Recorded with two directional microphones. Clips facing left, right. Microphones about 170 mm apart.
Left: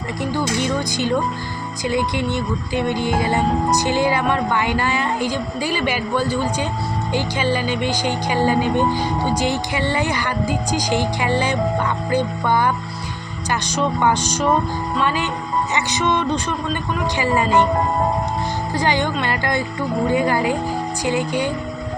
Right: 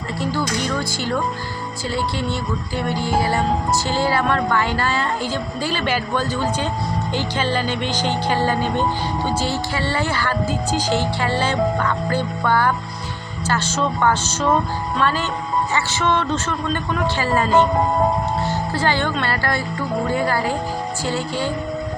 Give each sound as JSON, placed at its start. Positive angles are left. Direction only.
{"t": 0.2, "sound": "music", "side_deg": 15}
{"t": 18.7, "sound": "music", "side_deg": 15}